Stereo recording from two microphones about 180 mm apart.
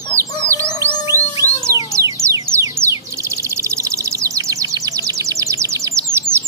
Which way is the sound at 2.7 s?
15° right (ahead or behind).